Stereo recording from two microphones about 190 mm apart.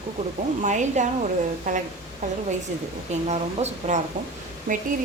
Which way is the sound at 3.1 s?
35° right (ahead or behind).